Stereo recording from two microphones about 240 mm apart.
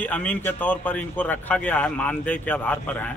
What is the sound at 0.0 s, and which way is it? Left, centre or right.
Speech, centre.